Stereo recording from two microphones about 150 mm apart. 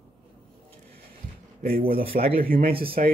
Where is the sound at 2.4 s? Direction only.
75° right (ahead or behind).